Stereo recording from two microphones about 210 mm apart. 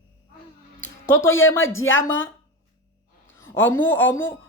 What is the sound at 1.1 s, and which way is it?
Speech, 70° left (ahead or behind).